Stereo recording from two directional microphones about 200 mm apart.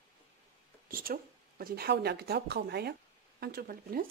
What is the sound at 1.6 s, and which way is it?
Speech, 50° right (ahead or behind).